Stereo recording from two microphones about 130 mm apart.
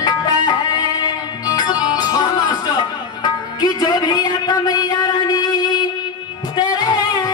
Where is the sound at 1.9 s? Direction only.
30° left (ahead or behind).